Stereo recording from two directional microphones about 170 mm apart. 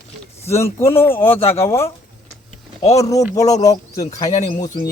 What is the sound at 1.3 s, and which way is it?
Speech, 35° left (ahead or behind).